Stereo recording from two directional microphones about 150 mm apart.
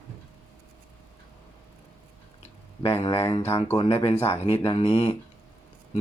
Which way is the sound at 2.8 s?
40° left (ahead or behind).